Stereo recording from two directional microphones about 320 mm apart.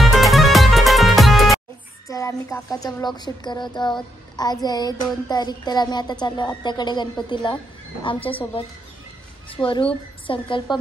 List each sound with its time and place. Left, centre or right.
0.0 s music: centre
2.0 s speech: centre
9.7 s speech: centre